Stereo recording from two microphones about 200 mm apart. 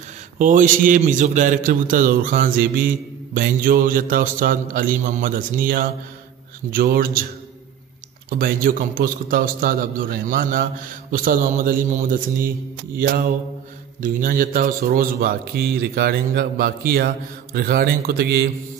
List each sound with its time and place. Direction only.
0.4 s a man's voice: 40° right (ahead or behind)
8.3 s a man's voice: 45° right (ahead or behind)
14.0 s a man's voice: 45° right (ahead or behind)